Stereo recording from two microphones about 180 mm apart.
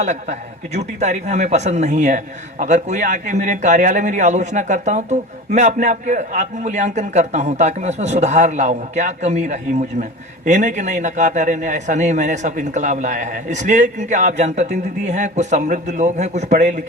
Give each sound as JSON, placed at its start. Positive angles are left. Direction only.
{"t": 0.0, "sound": "a man's voice", "side_deg": -40}